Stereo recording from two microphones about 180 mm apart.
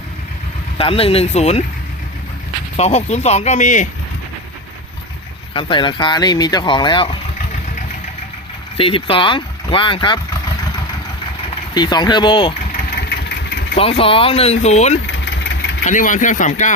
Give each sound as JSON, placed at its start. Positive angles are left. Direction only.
{"t": 0.8, "sound": "speech", "side_deg": 30}
{"t": 2.7, "sound": "speech", "side_deg": 35}
{"t": 5.5, "sound": "speech", "side_deg": 25}
{"t": 8.8, "sound": "speech", "side_deg": 30}
{"t": 11.7, "sound": "speech", "side_deg": 25}
{"t": 13.0, "sound": "vehicle", "side_deg": 65}
{"t": 13.7, "sound": "speech", "side_deg": 30}